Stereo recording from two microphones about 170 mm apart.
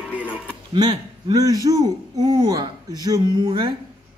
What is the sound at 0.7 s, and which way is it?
Speech, 25° right (ahead or behind).